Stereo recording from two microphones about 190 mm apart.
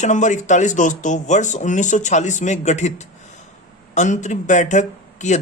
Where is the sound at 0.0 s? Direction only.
40° left (ahead or behind).